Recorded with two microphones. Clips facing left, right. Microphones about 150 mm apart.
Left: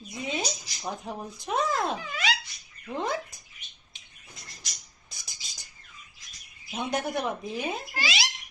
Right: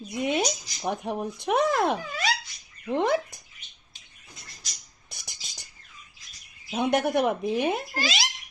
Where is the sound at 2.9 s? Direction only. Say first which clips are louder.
Right 7 dB; 65° right (ahead or behind).